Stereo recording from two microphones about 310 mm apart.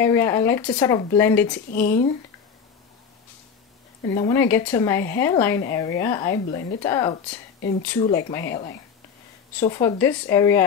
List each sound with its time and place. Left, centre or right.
0.0 s speech: centre
1.7 s speech: left
4.1 s speech: centre
8.3 s speech: centre